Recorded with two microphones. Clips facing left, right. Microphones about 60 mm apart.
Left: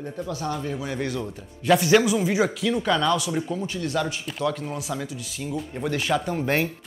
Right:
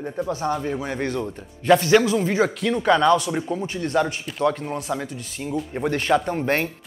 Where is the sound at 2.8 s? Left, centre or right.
Right.